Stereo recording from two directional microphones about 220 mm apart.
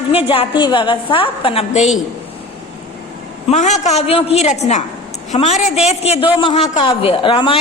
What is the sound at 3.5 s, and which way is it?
A man's voice, 30° left (ahead or behind).